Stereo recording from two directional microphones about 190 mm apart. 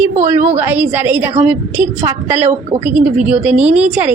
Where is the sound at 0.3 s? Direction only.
35° right (ahead or behind).